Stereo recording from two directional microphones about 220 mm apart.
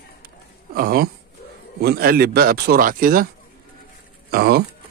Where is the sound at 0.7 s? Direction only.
40° right (ahead or behind).